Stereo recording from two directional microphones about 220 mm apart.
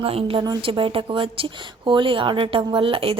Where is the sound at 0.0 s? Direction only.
25° right (ahead or behind).